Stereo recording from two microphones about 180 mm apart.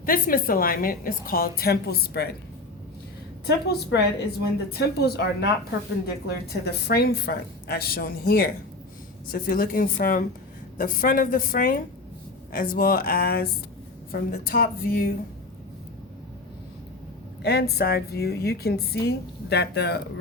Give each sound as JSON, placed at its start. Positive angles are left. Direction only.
{"t": 0.0, "sound": "a woman's voice", "side_deg": 50}
{"t": 3.4, "sound": "a woman's voice", "side_deg": 65}
{"t": 17.4, "sound": "a woman's voice", "side_deg": 60}